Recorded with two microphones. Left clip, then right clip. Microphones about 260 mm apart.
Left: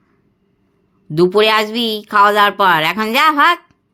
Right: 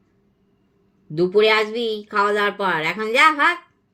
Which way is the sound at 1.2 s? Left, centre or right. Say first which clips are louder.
Left 4 dB; left.